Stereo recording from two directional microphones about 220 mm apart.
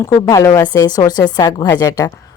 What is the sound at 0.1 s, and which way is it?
A woman's voice, 15° left (ahead or behind).